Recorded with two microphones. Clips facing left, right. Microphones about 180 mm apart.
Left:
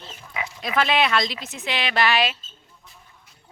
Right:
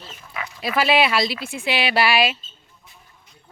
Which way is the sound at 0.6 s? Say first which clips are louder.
Right 3 dB; 5° right (ahead or behind).